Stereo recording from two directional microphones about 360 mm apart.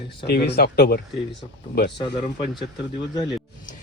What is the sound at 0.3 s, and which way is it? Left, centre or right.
Speech, left.